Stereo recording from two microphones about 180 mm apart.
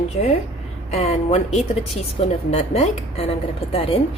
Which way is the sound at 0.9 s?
40° left (ahead or behind).